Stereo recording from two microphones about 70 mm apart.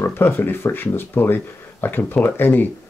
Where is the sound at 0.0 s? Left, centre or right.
Left.